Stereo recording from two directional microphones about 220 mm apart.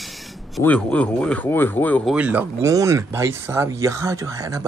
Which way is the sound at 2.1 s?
5° right (ahead or behind).